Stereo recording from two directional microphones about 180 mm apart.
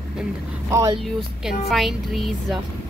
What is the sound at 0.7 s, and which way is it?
Speech, 15° right (ahead or behind).